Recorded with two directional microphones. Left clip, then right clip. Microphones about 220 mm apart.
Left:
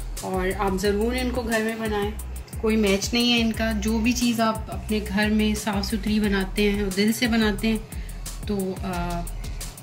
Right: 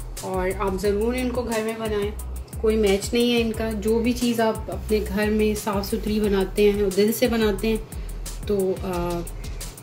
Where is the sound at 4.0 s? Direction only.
5° right (ahead or behind).